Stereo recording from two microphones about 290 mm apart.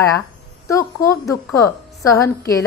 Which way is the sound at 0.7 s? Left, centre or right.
Centre.